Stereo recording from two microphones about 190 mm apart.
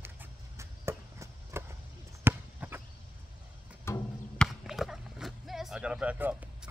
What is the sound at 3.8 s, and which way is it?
Music, 15° left (ahead or behind).